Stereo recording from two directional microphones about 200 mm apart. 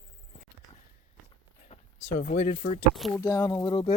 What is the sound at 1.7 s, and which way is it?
Speech, 40° left (ahead or behind).